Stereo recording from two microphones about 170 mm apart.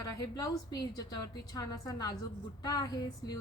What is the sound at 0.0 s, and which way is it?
A woman's voice, 20° left (ahead or behind).